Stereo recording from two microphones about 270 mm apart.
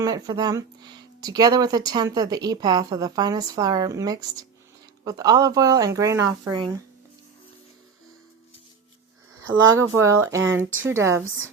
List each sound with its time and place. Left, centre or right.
0.0 s speech: centre
9.4 s speech: right
10.0 s speech: centre